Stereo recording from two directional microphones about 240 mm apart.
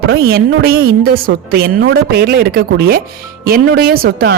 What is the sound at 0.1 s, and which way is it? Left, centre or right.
Speech, right.